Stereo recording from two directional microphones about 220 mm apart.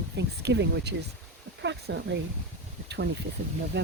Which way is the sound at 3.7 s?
50° right (ahead or behind).